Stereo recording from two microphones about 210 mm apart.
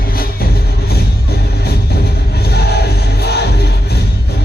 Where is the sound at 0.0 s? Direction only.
45° left (ahead or behind).